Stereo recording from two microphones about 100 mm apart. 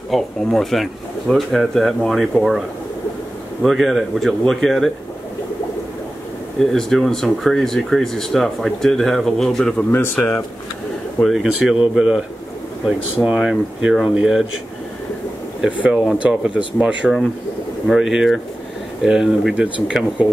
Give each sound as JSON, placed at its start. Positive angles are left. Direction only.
{"t": 0.1, "sound": "speech", "side_deg": 5}
{"t": 3.6, "sound": "speech", "side_deg": 0}
{"t": 6.6, "sound": "speech", "side_deg": 5}
{"t": 9.8, "sound": "speech", "side_deg": 20}
{"t": 11.2, "sound": "speech", "side_deg": 0}
{"t": 13.2, "sound": "speech", "side_deg": -5}
{"t": 15.6, "sound": "speech", "side_deg": -10}